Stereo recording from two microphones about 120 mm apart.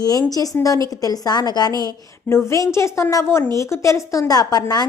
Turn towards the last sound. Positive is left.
turn(degrees=30)  # may be behind; listen again after turning